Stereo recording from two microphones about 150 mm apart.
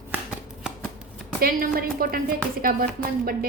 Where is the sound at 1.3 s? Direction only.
90° right.